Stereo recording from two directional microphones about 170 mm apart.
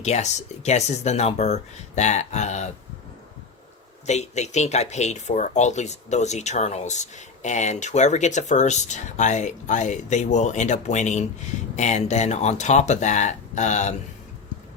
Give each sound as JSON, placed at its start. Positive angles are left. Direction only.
{"t": 0.0, "sound": "speech", "side_deg": 40}
{"t": 4.0, "sound": "speech", "side_deg": 40}